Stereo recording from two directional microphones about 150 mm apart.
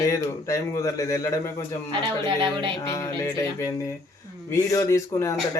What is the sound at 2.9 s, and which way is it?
Speech, 25° left (ahead or behind).